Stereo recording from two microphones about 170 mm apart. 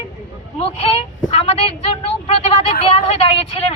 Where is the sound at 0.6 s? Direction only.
35° left (ahead or behind).